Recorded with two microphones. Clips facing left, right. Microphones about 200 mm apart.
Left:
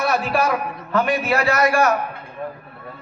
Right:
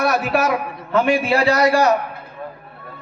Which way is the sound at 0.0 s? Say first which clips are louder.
Right 2 dB; 5° right (ahead or behind).